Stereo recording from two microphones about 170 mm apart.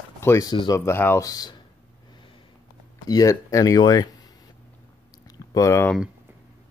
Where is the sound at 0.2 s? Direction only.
15° left (ahead or behind).